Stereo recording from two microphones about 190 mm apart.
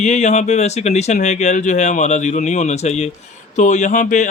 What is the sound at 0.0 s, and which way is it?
Speech, 35° left (ahead or behind).